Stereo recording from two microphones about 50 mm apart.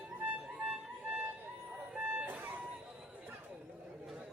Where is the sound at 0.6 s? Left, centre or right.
Right.